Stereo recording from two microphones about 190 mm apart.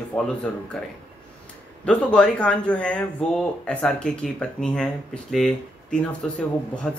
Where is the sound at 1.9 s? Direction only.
5° left (ahead or behind).